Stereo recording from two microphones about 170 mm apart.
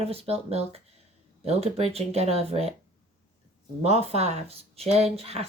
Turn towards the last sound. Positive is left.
turn(degrees=-35)  # may be behind; listen again after turning